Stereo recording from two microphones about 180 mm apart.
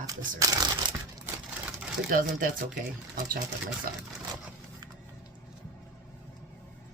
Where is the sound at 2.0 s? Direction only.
50° right (ahead or behind).